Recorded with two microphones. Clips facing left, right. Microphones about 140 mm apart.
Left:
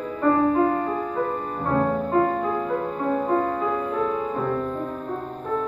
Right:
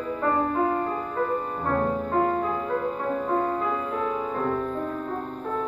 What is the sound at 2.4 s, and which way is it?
Music, centre (ahead or behind).